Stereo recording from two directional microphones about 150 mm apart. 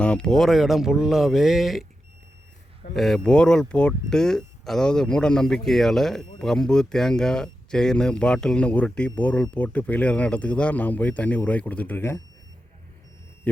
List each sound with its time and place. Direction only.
0.0 s speech: 5° left (ahead or behind)
2.9 s speech: centre (ahead or behind)